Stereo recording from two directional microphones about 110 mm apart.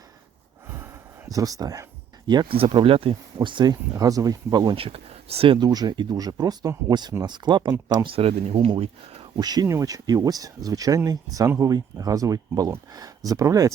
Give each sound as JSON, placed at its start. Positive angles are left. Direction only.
{"t": 0.7, "sound": "a sound", "side_deg": -20}
{"t": 2.5, "sound": "speech", "side_deg": -60}
{"t": 3.4, "sound": "speech", "side_deg": -45}
{"t": 4.7, "sound": "speech", "side_deg": -60}
{"t": 5.5, "sound": "speech", "side_deg": -35}
{"t": 8.1, "sound": "speech", "side_deg": -60}
{"t": 9.4, "sound": "speech", "side_deg": -35}